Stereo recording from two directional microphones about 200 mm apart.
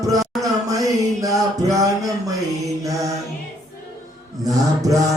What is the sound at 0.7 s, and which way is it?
Mantra, 15° right (ahead or behind).